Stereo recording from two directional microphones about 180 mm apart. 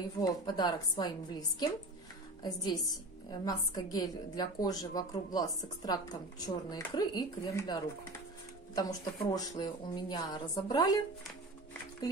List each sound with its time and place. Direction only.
0.2 s a woman's voice: 25° left (ahead or behind)